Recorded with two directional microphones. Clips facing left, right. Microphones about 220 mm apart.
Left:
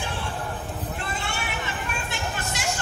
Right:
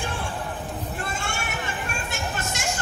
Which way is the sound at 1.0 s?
45° right (ahead or behind).